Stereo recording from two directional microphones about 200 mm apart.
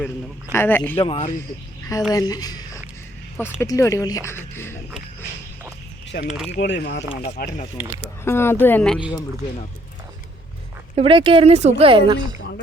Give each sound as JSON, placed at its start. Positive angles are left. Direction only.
{"t": 0.5, "sound": "speech", "side_deg": 10}
{"t": 1.0, "sound": "speech", "side_deg": 30}
{"t": 2.1, "sound": "speech", "side_deg": 20}
{"t": 6.1, "sound": "speech", "side_deg": 50}
{"t": 7.1, "sound": "speech", "side_deg": 30}
{"t": 8.2, "sound": "speech", "side_deg": 10}
{"t": 10.9, "sound": "speech", "side_deg": -25}